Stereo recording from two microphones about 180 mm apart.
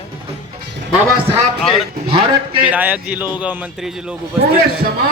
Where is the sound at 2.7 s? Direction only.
10° right (ahead or behind).